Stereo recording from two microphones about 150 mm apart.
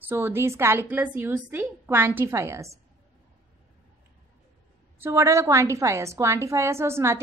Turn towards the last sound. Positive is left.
turn(degrees=-15)  # may be behind; listen again after turning